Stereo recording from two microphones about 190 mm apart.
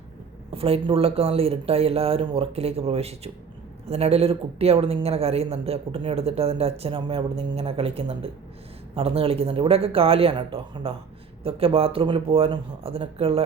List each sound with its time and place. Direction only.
0.5 s speech: 30° right (ahead or behind)